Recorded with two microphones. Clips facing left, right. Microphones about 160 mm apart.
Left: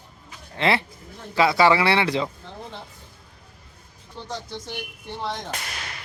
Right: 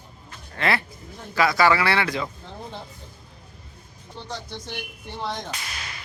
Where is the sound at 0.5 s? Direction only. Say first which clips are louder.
Left 2 dB; 25° left (ahead or behind).